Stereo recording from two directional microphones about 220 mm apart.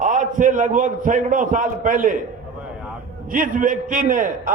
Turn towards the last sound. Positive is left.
turn(degrees=-40)  # may be behind; listen again after turning